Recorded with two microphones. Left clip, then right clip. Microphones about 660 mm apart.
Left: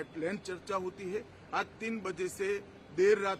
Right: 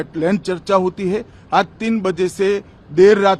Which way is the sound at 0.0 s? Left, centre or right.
Right.